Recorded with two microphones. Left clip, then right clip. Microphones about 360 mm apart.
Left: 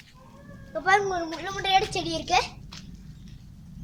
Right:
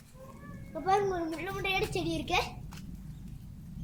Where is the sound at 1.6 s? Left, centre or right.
Centre.